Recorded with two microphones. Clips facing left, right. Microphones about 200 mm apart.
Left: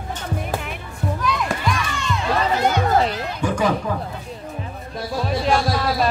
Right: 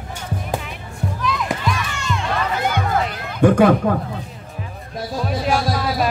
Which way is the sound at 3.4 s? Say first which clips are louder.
Right 9 dB; 60° right (ahead or behind).